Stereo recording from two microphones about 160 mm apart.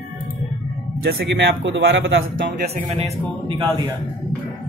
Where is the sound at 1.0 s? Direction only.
85° right.